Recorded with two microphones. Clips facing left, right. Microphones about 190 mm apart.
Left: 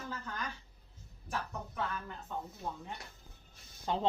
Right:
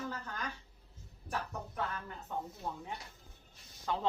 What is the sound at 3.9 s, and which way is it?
Speech, 25° left (ahead or behind).